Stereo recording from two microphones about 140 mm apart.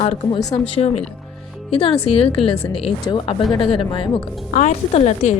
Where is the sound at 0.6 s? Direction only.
45° left (ahead or behind).